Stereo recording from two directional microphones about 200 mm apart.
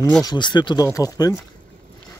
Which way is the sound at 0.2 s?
20° left (ahead or behind).